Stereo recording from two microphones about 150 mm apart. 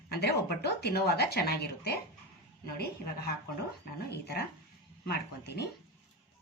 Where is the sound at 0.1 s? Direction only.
90° left.